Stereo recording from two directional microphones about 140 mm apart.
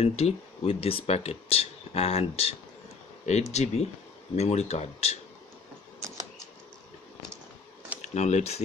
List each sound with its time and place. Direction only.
0.0 s speech: 45° left (ahead or behind)
3.5 s speech: 50° left (ahead or behind)
8.0 s speech: 55° left (ahead or behind)